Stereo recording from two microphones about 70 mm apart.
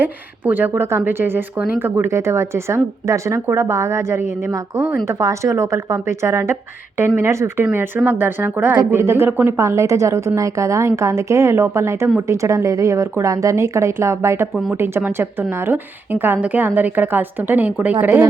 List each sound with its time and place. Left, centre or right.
0.0 s speech: right
0.7 s a woman's voice: right